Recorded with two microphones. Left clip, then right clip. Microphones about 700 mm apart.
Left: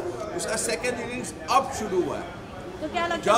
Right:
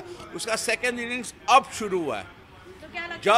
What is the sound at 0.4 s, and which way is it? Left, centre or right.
A man's voice, right.